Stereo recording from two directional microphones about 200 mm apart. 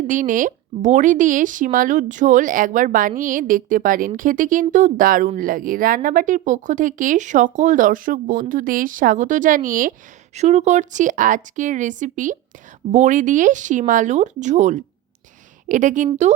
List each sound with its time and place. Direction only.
0.1 s speech: 40° right (ahead or behind)